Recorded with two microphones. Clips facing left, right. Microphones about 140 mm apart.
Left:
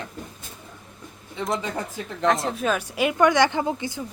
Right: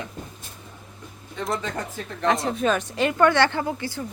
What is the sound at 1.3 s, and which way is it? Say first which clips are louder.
Speech: left 1 dB; centre (ahead or behind).